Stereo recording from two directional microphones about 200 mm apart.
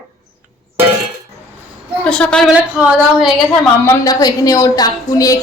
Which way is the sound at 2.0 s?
5° left (ahead or behind).